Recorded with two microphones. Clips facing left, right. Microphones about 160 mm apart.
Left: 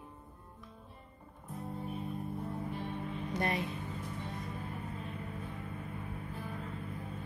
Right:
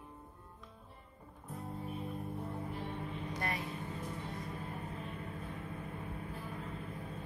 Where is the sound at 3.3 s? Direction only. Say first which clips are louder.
Left 6 dB; 25° left (ahead or behind).